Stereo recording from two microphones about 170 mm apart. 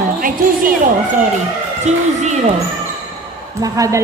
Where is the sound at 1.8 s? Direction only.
45° right (ahead or behind).